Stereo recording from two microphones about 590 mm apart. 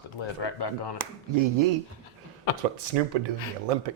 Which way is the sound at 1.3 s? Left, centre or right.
Right.